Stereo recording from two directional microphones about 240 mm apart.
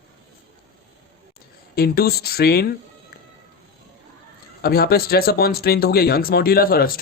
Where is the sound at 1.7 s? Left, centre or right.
Left.